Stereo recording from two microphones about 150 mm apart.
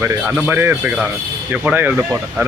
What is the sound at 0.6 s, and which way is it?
Speech, 15° right (ahead or behind).